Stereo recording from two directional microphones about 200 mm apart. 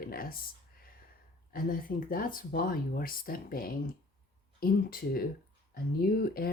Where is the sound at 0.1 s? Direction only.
50° left (ahead or behind).